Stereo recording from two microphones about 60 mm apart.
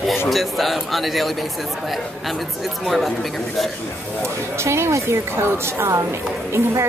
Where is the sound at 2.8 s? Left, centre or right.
Centre.